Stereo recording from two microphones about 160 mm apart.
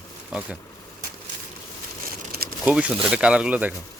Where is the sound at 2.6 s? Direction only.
5° right (ahead or behind).